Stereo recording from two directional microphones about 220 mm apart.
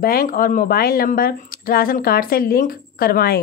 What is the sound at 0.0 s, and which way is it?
Speech, 40° left (ahead or behind).